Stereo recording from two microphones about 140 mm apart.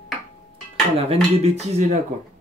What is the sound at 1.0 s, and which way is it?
Speech, 45° right (ahead or behind).